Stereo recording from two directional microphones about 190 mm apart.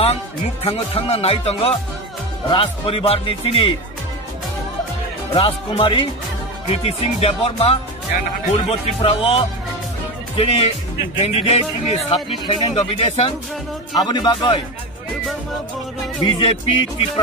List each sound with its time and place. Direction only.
0.7 s speech: 30° left (ahead or behind)
5.3 s speech: 30° left (ahead or behind)
16.2 s speech: 30° left (ahead or behind)